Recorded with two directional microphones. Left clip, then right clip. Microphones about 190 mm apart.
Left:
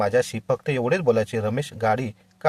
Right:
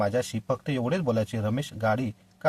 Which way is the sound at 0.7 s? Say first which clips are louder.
Left 7 dB; 20° left (ahead or behind).